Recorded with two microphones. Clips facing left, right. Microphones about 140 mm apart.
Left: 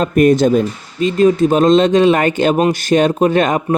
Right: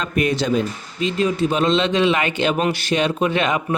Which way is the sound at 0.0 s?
45° left (ahead or behind).